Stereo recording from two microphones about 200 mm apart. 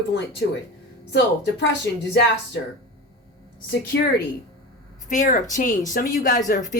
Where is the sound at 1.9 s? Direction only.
60° left (ahead or behind).